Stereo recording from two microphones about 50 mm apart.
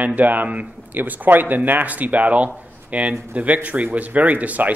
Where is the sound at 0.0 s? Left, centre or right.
Right.